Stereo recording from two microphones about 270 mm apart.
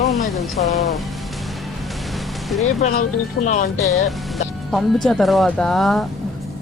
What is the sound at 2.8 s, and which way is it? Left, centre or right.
Speech, left.